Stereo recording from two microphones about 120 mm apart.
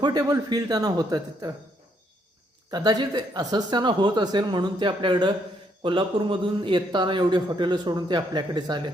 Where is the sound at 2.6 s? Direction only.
35° right (ahead or behind).